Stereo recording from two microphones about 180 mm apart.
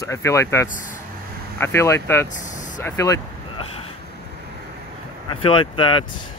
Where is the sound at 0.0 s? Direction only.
15° left (ahead or behind).